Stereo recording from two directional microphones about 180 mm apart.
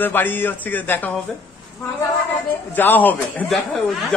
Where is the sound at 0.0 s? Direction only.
10° left (ahead or behind).